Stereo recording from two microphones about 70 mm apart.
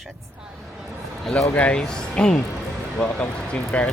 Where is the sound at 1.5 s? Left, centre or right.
Centre.